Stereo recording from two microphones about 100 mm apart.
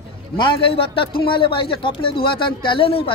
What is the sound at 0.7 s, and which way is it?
Speech, 60° left (ahead or behind).